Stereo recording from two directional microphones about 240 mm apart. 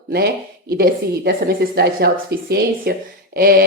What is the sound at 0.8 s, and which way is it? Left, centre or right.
Speech, right.